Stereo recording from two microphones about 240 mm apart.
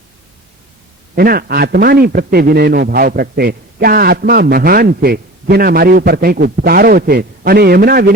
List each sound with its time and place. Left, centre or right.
1.1 s a man's voice: right